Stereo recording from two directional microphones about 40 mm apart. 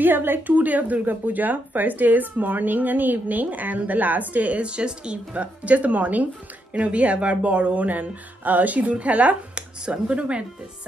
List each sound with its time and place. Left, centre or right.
0.0 s a sound: right
0.5 s speech: right
6.7 s speech: right